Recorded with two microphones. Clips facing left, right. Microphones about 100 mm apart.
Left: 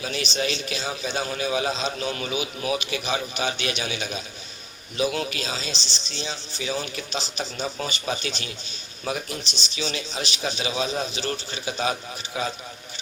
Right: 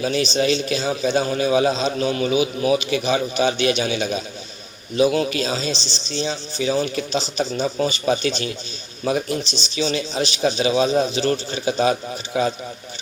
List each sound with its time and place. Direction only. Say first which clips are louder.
0.0 s a man's voice: right 8 dB; 35° right (ahead or behind)
9.7 s a man's voice: right 8 dB; 35° right (ahead or behind)